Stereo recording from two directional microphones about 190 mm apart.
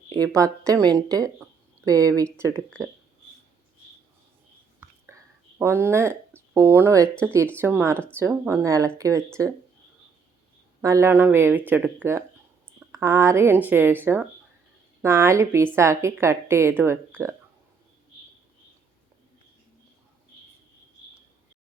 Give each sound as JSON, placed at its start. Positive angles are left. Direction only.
{"t": 0.1, "sound": "a woman's voice", "side_deg": -20}
{"t": 5.1, "sound": "a sound", "side_deg": -15}
{"t": 5.5, "sound": "a woman's voice", "side_deg": -15}
{"t": 10.8, "sound": "a woman's voice", "side_deg": -15}